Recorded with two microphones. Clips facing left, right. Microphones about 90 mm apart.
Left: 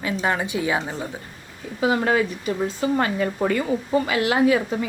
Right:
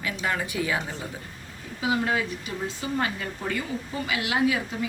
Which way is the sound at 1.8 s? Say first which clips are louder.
Left 5 dB; 50° left (ahead or behind).